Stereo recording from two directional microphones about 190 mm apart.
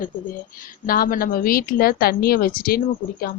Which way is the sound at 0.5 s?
50° left (ahead or behind).